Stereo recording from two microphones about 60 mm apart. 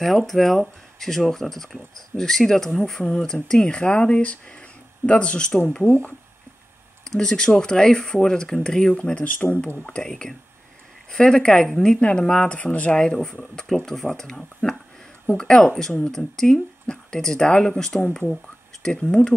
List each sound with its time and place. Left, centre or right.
0.0 s speech: centre
7.1 s speech: centre
13.0 s speech: centre